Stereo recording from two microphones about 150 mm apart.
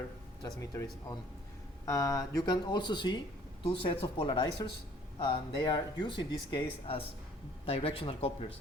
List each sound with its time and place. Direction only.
0.4 s speech: 20° left (ahead or behind); by 8.5 s 40° left (ahead or behind)